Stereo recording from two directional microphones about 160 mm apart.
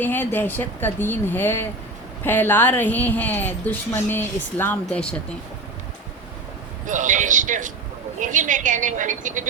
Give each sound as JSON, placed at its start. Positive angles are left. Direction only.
{"t": 0.0, "sound": "speech", "side_deg": 10}
{"t": 6.8, "sound": "a woman's voice", "side_deg": -50}